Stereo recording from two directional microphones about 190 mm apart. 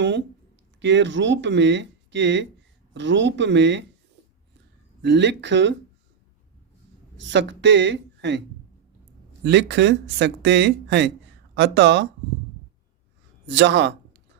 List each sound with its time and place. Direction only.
0.8 s speech: 70° right (ahead or behind)
5.0 s speech: 65° right (ahead or behind)
7.2 s speech: 70° right (ahead or behind)
9.4 s speech: 65° right (ahead or behind)
13.5 s a man's voice: 65° right (ahead or behind)